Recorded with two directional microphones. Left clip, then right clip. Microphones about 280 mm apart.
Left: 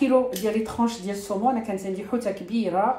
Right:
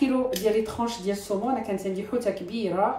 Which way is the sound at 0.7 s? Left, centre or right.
Left.